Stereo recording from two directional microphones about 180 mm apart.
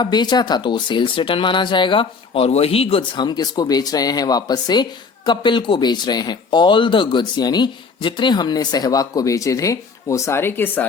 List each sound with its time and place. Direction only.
0.0 s speech: 25° left (ahead or behind)